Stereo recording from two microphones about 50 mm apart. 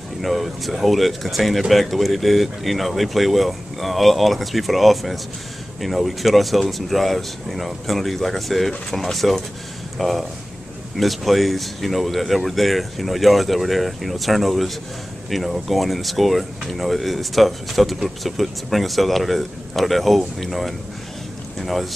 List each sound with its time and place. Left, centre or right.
0.2 s speech: centre